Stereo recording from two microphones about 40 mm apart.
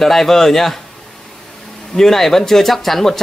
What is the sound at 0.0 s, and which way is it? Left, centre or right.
Speech, centre.